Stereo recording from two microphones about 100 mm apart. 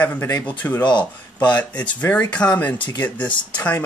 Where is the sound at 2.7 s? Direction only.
50° left (ahead or behind).